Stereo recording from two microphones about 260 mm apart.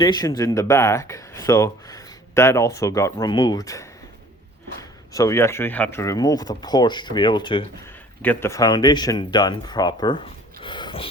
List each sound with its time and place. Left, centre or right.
0.0 s speech: centre
8.2 s speech: centre